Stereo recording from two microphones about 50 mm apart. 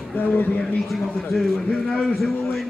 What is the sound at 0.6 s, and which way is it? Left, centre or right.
A man's voice, centre.